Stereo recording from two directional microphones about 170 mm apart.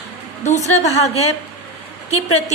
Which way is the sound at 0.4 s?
45° left (ahead or behind).